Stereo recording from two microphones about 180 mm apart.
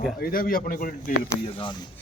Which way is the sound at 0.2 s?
55° left (ahead or behind).